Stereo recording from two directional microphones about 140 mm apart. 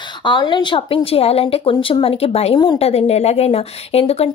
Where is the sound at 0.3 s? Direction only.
35° left (ahead or behind).